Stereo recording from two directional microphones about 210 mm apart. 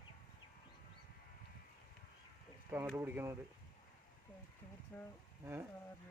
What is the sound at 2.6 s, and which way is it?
Speech, 10° right (ahead or behind).